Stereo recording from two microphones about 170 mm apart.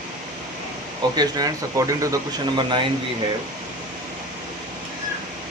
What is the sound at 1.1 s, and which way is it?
Speech, 20° right (ahead or behind).